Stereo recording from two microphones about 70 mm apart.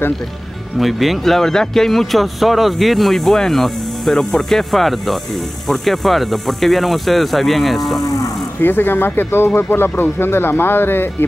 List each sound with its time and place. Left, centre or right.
0.7 s a man's voice: centre
8.5 s speech: left